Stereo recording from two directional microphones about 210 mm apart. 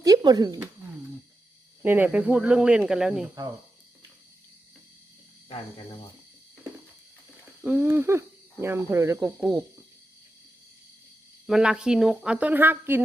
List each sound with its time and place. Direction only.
0.0 s speech: 20° right (ahead or behind)
1.8 s speech: 10° right (ahead or behind)
5.5 s speech: 25° left (ahead or behind)
7.6 s speech: 10° right (ahead or behind)
11.4 s speech: 5° right (ahead or behind)